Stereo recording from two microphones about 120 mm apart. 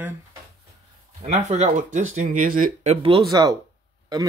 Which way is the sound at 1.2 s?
70° right (ahead or behind).